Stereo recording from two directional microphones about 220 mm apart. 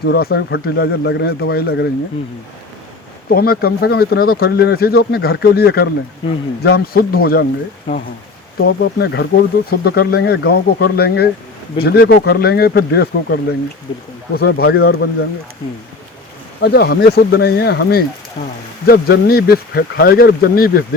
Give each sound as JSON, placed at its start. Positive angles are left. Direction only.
{"t": 0.0, "sound": "speech", "side_deg": 45}
{"t": 3.2, "sound": "speech", "side_deg": 45}
{"t": 8.6, "sound": "speech", "side_deg": 50}
{"t": 16.6, "sound": "speech", "side_deg": 45}